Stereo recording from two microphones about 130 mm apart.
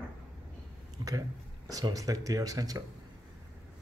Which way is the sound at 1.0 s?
25° right (ahead or behind).